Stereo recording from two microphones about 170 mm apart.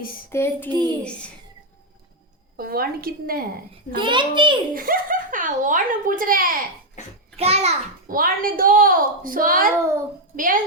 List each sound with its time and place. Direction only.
0.3 s a sound: 15° left (ahead or behind)
0.7 s a child's voice: 25° right (ahead or behind)
2.6 s a woman's voice: 60° right (ahead or behind)
3.9 s a child's voice: 30° right (ahead or behind)
4.7 s speech: 55° right (ahead or behind)
7.3 s a child's voice: 35° right (ahead or behind)
8.0 s a woman's voice: 55° right (ahead or behind)